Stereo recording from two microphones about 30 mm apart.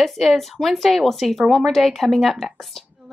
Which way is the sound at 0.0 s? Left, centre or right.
Centre.